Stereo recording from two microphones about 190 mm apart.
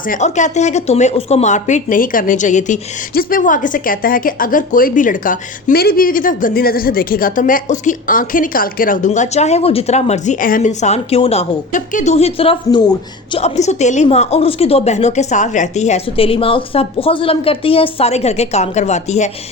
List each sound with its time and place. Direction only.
0.1 s a woman's voice: 40° left (ahead or behind)